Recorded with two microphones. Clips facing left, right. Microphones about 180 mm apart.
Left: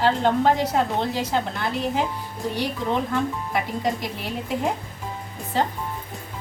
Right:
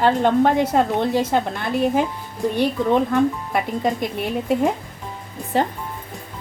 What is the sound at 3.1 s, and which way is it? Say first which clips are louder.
Speech: right 5 dB; 55° right (ahead or behind).